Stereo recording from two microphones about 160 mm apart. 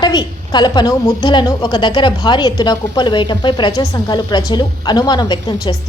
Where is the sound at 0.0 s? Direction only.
25° left (ahead or behind).